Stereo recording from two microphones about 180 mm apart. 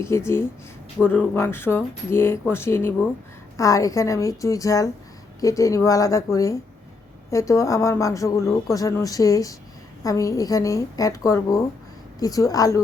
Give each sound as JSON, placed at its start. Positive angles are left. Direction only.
{"t": 0.0, "sound": "a woman's voice", "side_deg": 15}